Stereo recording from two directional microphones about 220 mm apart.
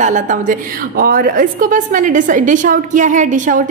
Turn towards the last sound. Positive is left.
turn(degrees=-35)  # may be behind; listen again after turning